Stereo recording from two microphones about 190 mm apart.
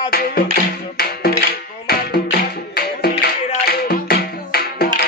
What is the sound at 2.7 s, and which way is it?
Music, 55° left (ahead or behind).